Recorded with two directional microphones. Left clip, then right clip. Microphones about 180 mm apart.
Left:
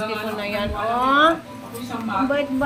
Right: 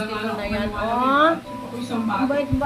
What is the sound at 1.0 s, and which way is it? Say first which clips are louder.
Speech: left 1 dB; 10° left (ahead or behind).